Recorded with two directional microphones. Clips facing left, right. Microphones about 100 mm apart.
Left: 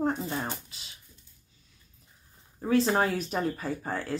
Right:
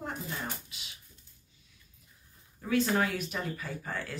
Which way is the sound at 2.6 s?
35° left (ahead or behind).